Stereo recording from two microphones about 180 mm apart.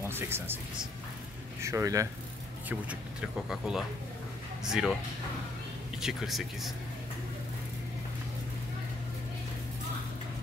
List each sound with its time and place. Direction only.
0.0 s speech: 15° right (ahead or behind)
1.6 s speech: 15° right (ahead or behind)
2.9 s speech: 5° right (ahead or behind)
5.9 s speech: centre (ahead or behind)